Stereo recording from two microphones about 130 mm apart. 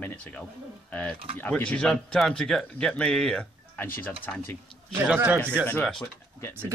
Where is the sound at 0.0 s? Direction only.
15° left (ahead or behind).